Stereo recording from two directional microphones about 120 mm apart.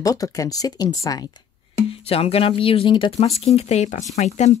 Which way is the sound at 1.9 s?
55° left (ahead or behind).